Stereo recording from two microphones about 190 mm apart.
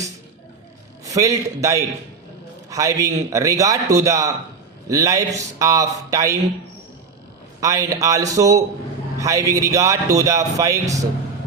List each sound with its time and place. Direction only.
1.0 s a man's voice: 15° right (ahead or behind)
7.6 s a man's voice: 20° right (ahead or behind)